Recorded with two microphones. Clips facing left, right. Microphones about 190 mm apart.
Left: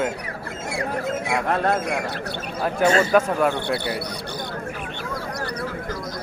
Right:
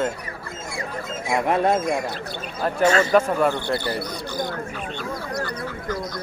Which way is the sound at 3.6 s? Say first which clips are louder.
Even; 65° left (ahead or behind).